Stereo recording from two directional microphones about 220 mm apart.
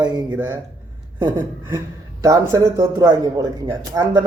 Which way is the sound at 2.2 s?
15° right (ahead or behind).